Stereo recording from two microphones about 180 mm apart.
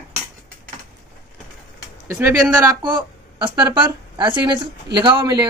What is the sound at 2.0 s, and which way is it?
A woman's voice, 10° right (ahead or behind).